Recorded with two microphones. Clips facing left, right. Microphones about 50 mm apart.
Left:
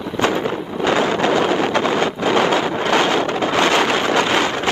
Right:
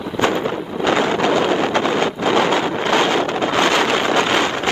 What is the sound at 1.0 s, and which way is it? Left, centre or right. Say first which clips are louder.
Wind noise: even; left.